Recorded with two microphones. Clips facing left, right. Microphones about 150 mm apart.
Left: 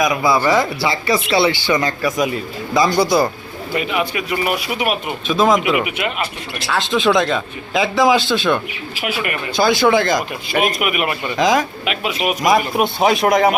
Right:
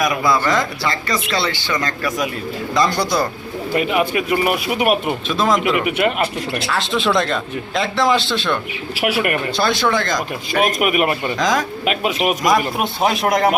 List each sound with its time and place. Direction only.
0.0 s speech: 5° left (ahead or behind)
3.8 s speech: 45° right (ahead or behind)
5.3 s speech: centre (ahead or behind)
9.0 s speech: 70° right (ahead or behind)
9.6 s speech: centre (ahead or behind)
10.8 s speech: 40° right (ahead or behind)
11.3 s speech: 5° left (ahead or behind)
11.9 s speech: 45° right (ahead or behind)
12.4 s speech: centre (ahead or behind)